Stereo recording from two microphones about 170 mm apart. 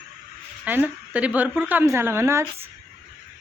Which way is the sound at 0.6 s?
10° right (ahead or behind).